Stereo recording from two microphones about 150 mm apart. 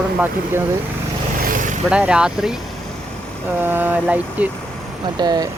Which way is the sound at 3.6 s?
15° right (ahead or behind).